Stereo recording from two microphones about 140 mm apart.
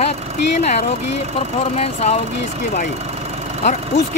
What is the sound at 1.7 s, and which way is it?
Speech, 50° left (ahead or behind).